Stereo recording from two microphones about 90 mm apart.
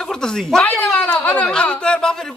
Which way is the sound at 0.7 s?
15° left (ahead or behind).